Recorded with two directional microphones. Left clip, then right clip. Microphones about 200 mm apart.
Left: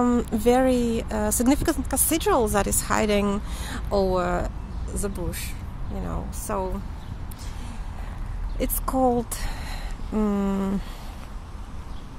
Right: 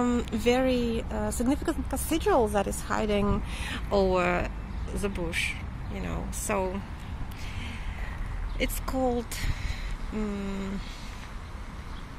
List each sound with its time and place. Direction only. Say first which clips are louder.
0.0 s speech: left 5 dB; 15° left (ahead or behind); by 6.7 s centre (ahead or behind)
8.5 s speech: left 5 dB; 20° left (ahead or behind)